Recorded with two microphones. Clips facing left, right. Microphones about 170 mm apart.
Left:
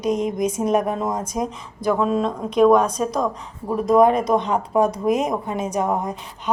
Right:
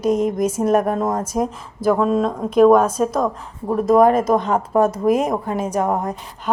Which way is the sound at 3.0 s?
50° right (ahead or behind).